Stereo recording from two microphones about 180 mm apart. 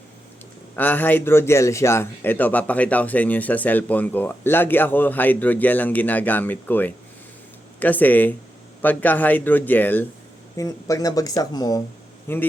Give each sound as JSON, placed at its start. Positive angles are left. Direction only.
{"t": 0.8, "sound": "a man's voice", "side_deg": 10}